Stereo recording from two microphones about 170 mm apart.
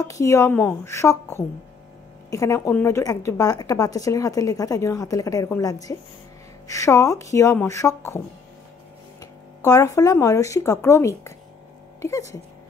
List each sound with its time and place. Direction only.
0.0 s a woman's voice: 20° left (ahead or behind)
9.2 s speech: 20° left (ahead or behind)